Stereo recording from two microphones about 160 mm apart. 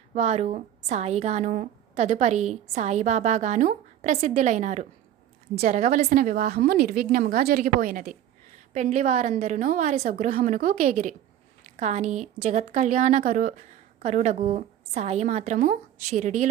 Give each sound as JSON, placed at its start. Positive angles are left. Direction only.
{"t": 0.1, "sound": "a woman's voice", "side_deg": -45}
{"t": 5.5, "sound": "a woman's voice", "side_deg": -60}
{"t": 8.5, "sound": "a woman's voice", "side_deg": -45}
{"t": 10.1, "sound": "a woman's voice", "side_deg": -60}
{"t": 11.8, "sound": "a woman's voice", "side_deg": -45}